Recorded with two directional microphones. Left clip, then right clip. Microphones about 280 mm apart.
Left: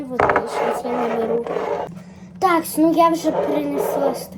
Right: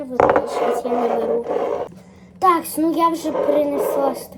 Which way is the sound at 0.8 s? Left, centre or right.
Right.